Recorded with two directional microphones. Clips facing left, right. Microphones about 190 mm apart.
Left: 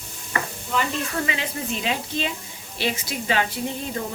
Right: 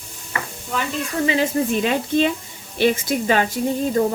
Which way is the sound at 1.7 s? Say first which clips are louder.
Right 8 dB; 55° right (ahead or behind).